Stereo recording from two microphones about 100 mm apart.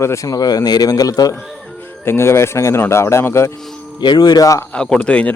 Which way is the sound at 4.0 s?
45° left (ahead or behind).